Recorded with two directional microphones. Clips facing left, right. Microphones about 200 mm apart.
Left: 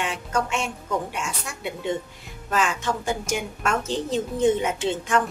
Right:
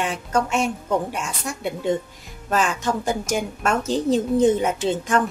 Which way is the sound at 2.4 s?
40° right (ahead or behind).